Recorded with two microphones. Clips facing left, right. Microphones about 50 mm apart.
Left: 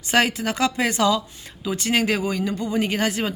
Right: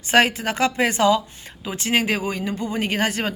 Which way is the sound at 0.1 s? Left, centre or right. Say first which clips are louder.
Right 2 dB; right.